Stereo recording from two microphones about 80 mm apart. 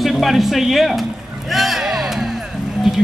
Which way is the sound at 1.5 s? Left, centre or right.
Centre.